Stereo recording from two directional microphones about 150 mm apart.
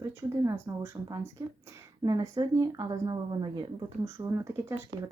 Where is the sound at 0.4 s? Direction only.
20° right (ahead or behind).